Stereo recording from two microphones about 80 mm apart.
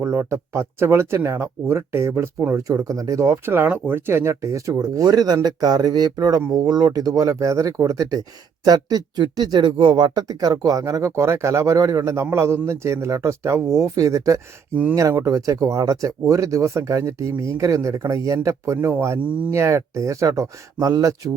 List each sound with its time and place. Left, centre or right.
0.0 s speech: right
2.6 s speech: right
3.4 s speech: right
4.7 s speech: right